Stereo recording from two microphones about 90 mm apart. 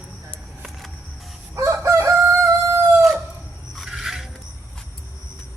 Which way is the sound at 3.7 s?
Centre (ahead or behind).